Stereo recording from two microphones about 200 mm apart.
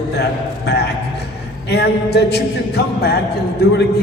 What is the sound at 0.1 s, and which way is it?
Music, 55° left (ahead or behind).